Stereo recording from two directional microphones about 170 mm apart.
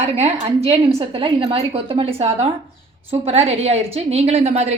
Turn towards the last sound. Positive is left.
turn(degrees=-40)  # may be behind; listen again after turning